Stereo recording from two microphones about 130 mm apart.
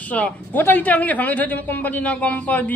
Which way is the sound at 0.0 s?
10° left (ahead or behind).